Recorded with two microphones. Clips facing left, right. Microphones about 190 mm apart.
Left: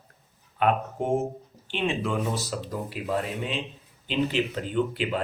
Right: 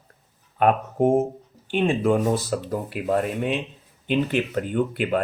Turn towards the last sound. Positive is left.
turn(degrees=-55)  # may be behind; listen again after turning